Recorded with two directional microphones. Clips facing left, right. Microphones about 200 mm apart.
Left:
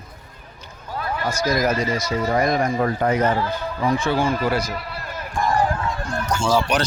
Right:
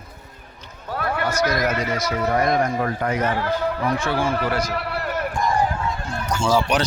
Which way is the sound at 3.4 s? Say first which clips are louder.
Right 1 dB; 65° right (ahead or behind).